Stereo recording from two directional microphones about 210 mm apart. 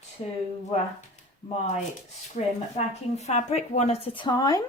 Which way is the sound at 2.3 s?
30° left (ahead or behind).